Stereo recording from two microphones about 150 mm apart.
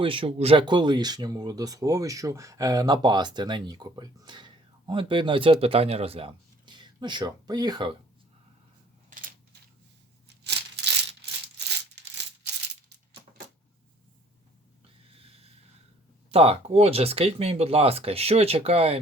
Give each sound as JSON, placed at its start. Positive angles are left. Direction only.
{"t": 0.0, "sound": "speech", "side_deg": -35}
{"t": 9.0, "sound": "a sound", "side_deg": -65}
{"t": 16.3, "sound": "speech", "side_deg": -40}